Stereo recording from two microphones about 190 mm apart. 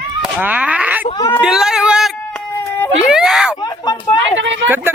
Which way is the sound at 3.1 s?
Centre (ahead or behind).